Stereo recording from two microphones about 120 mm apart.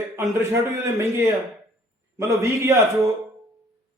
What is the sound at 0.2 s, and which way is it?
Speech, 20° right (ahead or behind).